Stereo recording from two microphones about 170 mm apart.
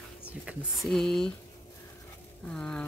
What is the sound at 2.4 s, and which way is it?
Speech, 5° left (ahead or behind).